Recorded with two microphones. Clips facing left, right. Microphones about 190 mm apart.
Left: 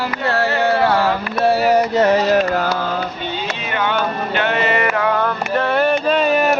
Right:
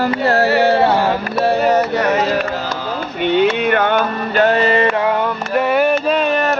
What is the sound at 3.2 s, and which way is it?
Music, 65° right (ahead or behind).